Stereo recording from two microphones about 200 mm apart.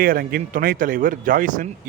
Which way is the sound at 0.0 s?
50° right (ahead or behind).